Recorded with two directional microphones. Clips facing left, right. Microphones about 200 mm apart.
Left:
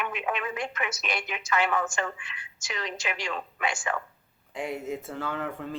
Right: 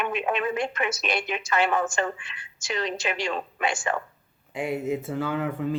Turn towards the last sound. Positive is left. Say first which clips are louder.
# right 6 dB
turn(degrees=-5)  # may be behind; listen again after turning